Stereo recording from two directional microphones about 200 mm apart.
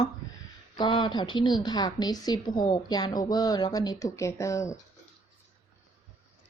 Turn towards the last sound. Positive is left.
turn(degrees=15)  # may be behind; listen again after turning